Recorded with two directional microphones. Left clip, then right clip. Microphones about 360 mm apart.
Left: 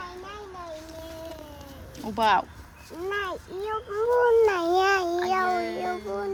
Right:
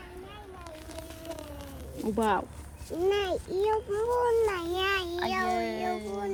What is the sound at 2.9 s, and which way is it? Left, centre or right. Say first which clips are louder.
Speech: right 3 dB; right.